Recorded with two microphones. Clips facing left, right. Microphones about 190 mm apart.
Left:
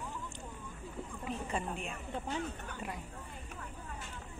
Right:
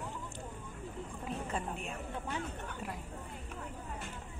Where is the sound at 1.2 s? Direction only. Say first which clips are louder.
Left 1 dB; centre (ahead or behind).